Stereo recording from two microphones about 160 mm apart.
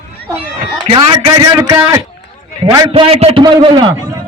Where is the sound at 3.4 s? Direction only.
30° right (ahead or behind).